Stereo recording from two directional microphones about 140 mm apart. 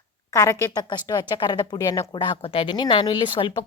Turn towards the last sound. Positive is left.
turn(degrees=35)  # may be behind; listen again after turning